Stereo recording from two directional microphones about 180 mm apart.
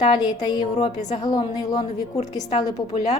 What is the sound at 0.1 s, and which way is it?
A woman's voice, 20° left (ahead or behind).